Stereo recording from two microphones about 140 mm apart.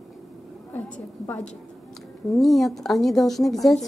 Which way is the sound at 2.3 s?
Centre (ahead or behind).